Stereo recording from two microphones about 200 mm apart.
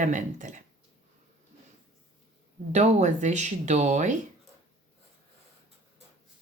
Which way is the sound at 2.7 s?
35° right (ahead or behind).